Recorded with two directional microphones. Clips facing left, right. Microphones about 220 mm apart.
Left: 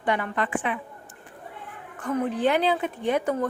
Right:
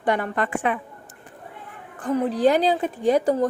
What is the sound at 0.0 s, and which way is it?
A woman's voice, 40° right (ahead or behind).